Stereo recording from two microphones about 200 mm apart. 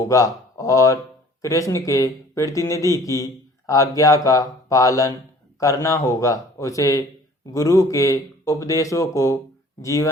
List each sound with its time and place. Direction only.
0.0 s a man's voice: 15° left (ahead or behind)